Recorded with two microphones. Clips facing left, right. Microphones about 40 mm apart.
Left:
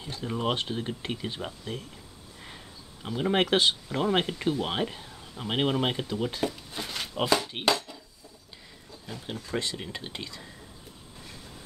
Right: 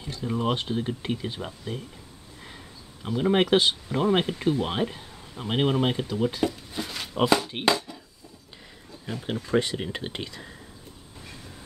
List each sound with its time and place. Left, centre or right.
0.0 s speech: centre
7.5 s speech: centre
9.0 s speech: right